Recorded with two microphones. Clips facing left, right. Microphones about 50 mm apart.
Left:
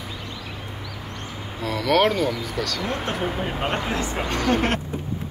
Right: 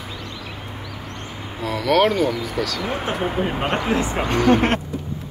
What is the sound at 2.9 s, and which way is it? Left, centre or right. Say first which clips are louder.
Speech: right 2 dB; centre.